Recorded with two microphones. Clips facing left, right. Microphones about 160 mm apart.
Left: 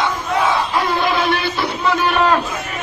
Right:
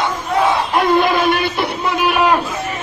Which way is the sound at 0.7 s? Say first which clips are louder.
Right 4 dB; 50° right (ahead or behind).